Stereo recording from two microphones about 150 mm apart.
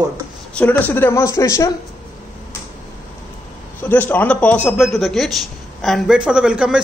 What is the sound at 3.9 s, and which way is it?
A man's voice, 10° left (ahead or behind).